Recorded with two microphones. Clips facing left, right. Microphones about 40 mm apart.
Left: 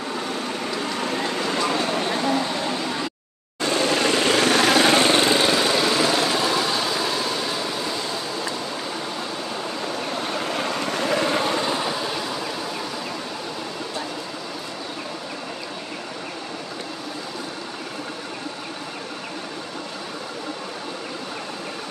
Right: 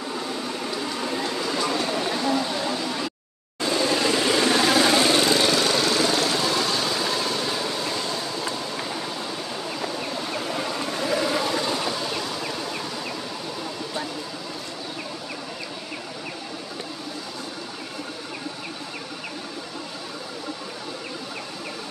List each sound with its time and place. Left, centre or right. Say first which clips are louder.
1.1 s a sound: left 2 dB; left
3.7 s vehicle: left 2 dB; left; by 7.8 s centre
10.2 s vehicle: left 3 dB; left
11.6 s vehicle: left 2 dB; centre